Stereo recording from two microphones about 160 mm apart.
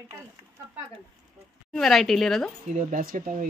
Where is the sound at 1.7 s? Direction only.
Centre (ahead or behind).